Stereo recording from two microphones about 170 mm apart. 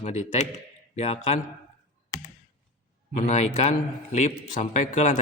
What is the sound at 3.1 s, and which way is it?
A man's voice, 40° left (ahead or behind).